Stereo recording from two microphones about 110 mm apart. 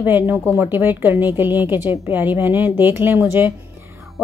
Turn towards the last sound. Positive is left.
turn(degrees=-20)  # may be behind; listen again after turning